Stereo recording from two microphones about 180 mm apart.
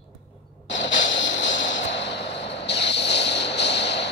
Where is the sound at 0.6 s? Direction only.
90° left.